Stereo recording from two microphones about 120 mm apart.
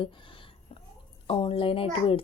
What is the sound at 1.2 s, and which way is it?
Speech, 50° left (ahead or behind).